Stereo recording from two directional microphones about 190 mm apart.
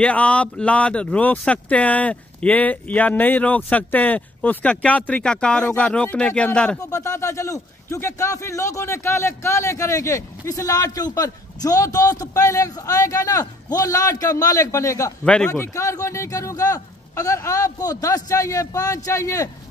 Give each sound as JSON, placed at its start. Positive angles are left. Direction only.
{"t": 0.0, "sound": "a man's voice", "side_deg": 5}
{"t": 6.8, "sound": "a man's voice", "side_deg": 15}
{"t": 15.2, "sound": "a man's voice", "side_deg": 5}